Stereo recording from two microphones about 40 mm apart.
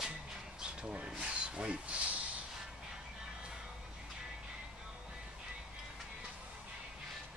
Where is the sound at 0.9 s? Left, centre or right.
Right.